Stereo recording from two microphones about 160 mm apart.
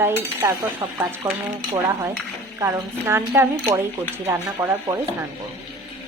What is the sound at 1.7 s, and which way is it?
Stir, 20° right (ahead or behind).